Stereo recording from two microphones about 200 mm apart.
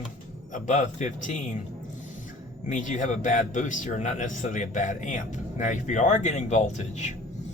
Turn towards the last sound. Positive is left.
turn(degrees=35)  # may be behind; listen again after turning